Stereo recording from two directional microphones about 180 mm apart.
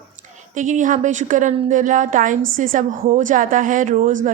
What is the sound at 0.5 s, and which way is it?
Speech, 45° right (ahead or behind).